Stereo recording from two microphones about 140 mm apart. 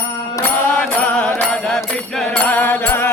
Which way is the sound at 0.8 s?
10° left (ahead or behind).